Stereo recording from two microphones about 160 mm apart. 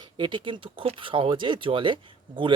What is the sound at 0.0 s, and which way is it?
Speech, 30° right (ahead or behind).